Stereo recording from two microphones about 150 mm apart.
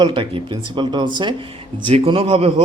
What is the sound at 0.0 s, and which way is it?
Speech, 35° right (ahead or behind).